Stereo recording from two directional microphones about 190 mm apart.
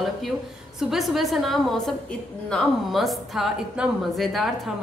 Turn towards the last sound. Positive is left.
turn(degrees=0)  # may be behind; listen again after turning